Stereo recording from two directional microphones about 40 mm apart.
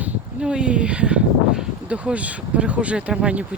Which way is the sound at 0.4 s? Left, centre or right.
Right.